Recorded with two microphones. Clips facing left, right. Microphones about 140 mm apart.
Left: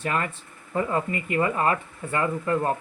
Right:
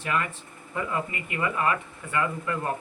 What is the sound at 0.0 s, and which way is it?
Speech, 40° left (ahead or behind).